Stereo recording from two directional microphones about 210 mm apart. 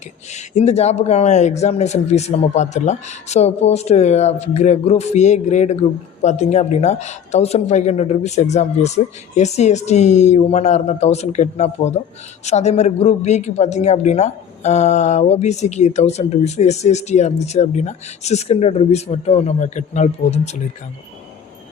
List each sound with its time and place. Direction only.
0.3 s speech: 30° left (ahead or behind)